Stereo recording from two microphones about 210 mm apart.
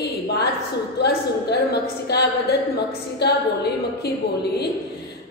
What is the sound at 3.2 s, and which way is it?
Speech, 50° left (ahead or behind).